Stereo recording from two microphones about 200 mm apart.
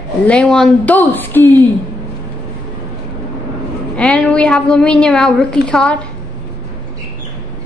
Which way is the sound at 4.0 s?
5° left (ahead or behind).